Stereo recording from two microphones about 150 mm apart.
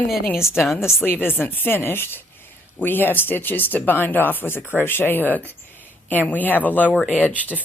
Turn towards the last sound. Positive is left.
turn(degrees=10)  # may be behind; listen again after turning